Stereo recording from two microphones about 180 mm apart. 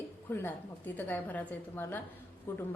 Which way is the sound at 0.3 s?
10° left (ahead or behind).